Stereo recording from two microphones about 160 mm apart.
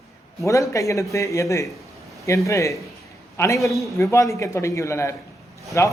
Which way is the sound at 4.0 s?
20° left (ahead or behind).